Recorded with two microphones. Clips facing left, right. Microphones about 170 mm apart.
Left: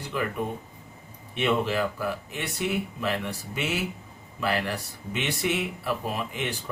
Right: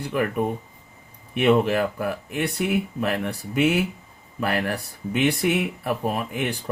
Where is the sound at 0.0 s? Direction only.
55° right (ahead or behind).